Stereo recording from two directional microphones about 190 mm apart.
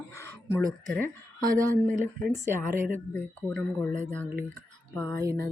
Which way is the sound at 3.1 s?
10° left (ahead or behind).